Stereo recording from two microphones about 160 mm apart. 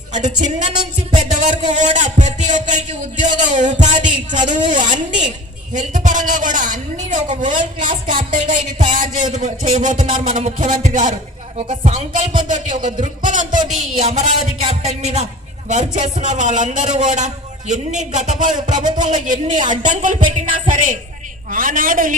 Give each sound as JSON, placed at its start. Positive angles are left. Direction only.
{"t": 0.1, "sound": "music", "side_deg": -50}
{"t": 1.5, "sound": "a woman's voice", "side_deg": -50}